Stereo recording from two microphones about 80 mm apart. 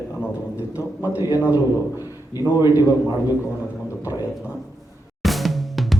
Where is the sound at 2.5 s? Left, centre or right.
Left.